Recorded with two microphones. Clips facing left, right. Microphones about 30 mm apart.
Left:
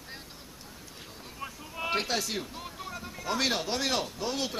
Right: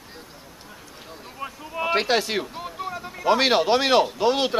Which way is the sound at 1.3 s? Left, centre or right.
Centre.